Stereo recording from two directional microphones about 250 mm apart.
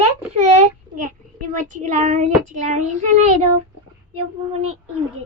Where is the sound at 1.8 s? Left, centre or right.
Right.